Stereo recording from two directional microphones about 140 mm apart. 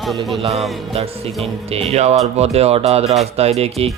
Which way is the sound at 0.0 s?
Centre (ahead or behind).